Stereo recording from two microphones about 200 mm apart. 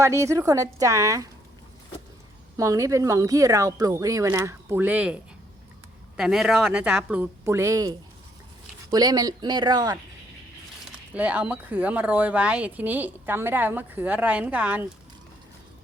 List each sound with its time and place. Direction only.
0.0 s speech: 15° right (ahead or behind)
2.6 s speech: 15° right (ahead or behind)
11.1 s speech: 10° right (ahead or behind)